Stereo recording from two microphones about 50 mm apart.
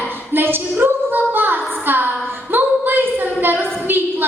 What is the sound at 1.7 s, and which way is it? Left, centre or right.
Music, right.